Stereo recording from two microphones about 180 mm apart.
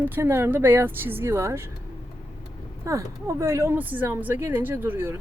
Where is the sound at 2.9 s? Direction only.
15° right (ahead or behind).